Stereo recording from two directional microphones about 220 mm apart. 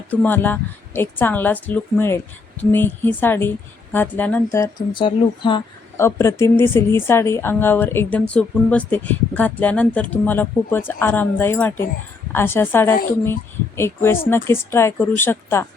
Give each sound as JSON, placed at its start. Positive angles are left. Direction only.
{"t": 0.1, "sound": "speech", "side_deg": 5}